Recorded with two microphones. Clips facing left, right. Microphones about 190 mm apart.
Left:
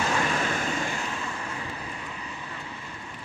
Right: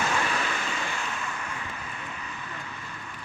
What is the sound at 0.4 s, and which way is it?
Vehicle, 45° left (ahead or behind).